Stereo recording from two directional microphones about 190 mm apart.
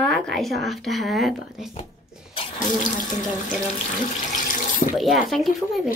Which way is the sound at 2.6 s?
45° left (ahead or behind).